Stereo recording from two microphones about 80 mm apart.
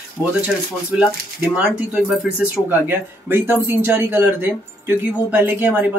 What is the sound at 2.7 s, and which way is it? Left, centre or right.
Speech, right.